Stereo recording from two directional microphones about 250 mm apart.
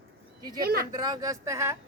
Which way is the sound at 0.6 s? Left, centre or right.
Right.